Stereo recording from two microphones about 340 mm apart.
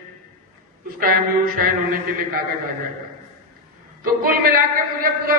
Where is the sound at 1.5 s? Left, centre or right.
Right.